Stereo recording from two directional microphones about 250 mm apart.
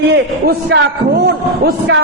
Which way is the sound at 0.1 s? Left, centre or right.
Right.